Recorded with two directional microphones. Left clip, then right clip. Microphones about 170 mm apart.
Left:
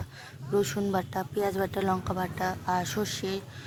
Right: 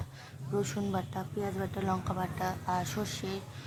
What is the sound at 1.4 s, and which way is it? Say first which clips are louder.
Speech: left 8 dB; 50° left (ahead or behind).